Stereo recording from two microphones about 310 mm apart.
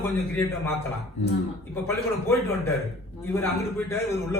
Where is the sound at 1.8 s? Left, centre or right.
Centre.